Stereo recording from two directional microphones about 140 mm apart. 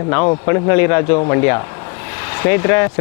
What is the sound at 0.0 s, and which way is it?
A man's voice, 20° left (ahead or behind).